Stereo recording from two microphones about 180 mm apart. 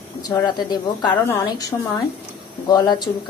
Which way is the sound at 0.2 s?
20° left (ahead or behind).